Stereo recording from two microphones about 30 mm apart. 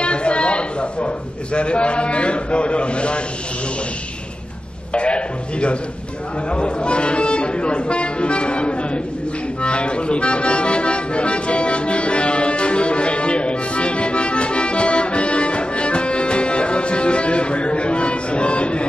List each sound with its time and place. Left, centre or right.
0.0 s a man's voice: left
4.9 s speech: left
9.6 s accordion: left